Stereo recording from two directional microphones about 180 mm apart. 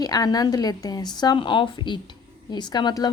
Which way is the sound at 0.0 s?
20° left (ahead or behind).